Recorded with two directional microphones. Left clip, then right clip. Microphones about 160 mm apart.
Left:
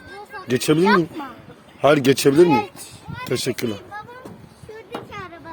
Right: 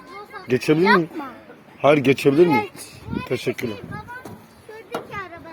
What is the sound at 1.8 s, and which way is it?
Speech, 70° left (ahead or behind).